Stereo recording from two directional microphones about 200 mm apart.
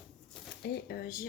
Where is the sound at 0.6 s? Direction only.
55° left (ahead or behind).